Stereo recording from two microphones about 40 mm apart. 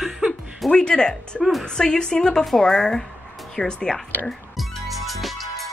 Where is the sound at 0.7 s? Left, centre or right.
Left.